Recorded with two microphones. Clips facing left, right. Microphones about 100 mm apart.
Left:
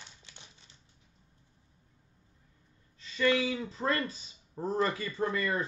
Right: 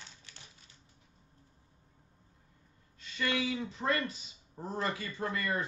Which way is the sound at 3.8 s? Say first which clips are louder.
Left 2 dB; 35° left (ahead or behind).